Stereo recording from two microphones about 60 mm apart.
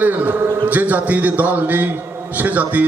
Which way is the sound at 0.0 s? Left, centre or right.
Right.